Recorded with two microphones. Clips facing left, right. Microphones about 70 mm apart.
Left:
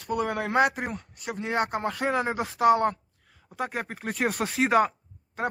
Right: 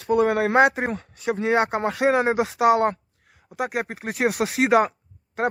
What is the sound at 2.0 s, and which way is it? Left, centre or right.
Speech, right.